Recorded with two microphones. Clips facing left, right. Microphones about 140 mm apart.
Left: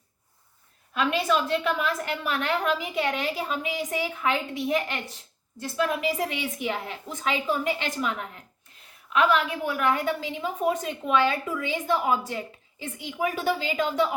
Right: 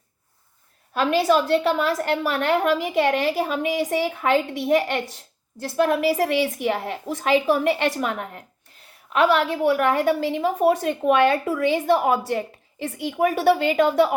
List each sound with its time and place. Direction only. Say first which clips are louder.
0.9 s a woman's voice: right 6 dB; 35° right (ahead or behind)
2.2 s a woman's voice: right 4 dB; 50° right (ahead or behind)
2.6 s a woman's voice: right 6 dB; 65° right (ahead or behind)
5.7 s a woman's voice: right 7 dB; 60° right (ahead or behind)
9.6 s a woman's voice: right 9 dB; 60° right (ahead or behind)